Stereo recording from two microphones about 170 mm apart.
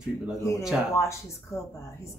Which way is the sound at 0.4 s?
15° left (ahead or behind).